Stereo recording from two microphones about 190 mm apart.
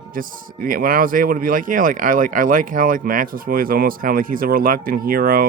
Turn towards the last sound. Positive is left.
turn(degrees=-50)  # may be behind; listen again after turning